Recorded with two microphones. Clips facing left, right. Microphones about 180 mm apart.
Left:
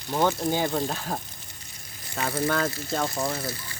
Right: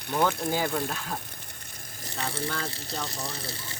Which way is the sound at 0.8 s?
30° left (ahead or behind).